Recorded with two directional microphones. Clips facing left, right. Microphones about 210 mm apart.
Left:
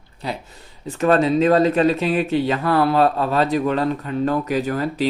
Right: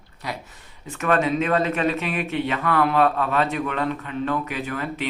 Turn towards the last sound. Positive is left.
turn(degrees=35)  # may be behind; listen again after turning